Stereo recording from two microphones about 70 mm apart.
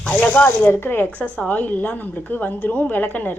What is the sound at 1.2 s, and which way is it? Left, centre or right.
A woman's voice, centre.